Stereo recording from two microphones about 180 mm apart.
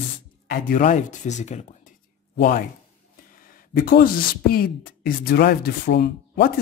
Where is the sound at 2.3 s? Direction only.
55° left (ahead or behind).